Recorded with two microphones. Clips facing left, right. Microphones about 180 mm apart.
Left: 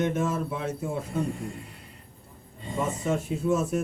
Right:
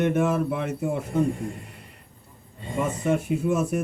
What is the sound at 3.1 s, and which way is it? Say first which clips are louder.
Speech: right 3 dB; 60° right (ahead or behind).